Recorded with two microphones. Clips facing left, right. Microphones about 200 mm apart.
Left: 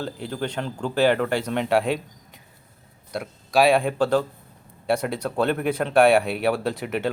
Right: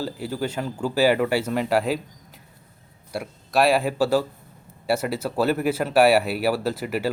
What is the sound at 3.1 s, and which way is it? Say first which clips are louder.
Speech: left 1 dB; 5° right (ahead or behind).